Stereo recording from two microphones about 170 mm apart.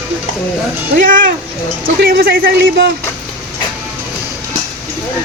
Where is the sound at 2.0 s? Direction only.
65° right (ahead or behind).